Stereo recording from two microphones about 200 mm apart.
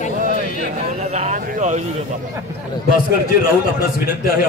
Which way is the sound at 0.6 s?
35° right (ahead or behind).